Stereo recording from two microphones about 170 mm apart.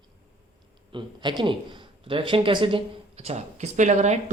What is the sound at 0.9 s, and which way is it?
A man's voice, 30° right (ahead or behind).